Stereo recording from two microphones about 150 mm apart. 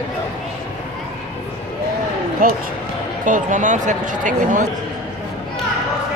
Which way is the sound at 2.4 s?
75° right (ahead or behind).